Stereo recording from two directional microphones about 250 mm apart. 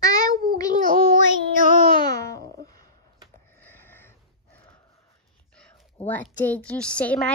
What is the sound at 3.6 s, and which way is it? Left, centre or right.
Sniff, centre.